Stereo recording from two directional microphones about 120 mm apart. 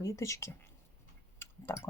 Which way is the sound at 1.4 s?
20° left (ahead or behind).